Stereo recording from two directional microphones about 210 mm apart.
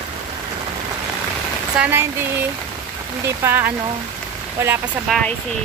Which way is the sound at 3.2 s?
10° right (ahead or behind).